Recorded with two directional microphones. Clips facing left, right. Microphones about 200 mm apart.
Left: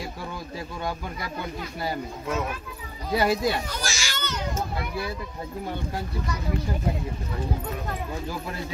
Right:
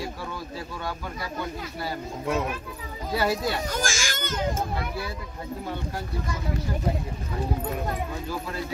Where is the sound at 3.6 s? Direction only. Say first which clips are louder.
Right 4 dB; 50° right (ahead or behind).